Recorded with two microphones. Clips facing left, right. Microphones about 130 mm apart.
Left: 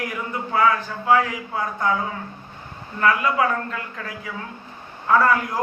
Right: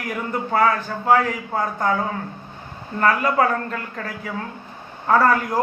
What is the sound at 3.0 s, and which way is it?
A man's voice, 45° right (ahead or behind).